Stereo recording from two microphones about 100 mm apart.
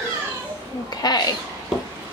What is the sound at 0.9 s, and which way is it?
Speech, 45° left (ahead or behind).